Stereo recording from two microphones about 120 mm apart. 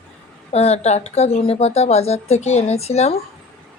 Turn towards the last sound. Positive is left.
turn(degrees=60)  # may be behind; listen again after turning